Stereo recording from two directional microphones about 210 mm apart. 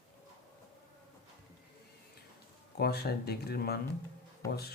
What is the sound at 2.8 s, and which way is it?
Speech, 50° left (ahead or behind).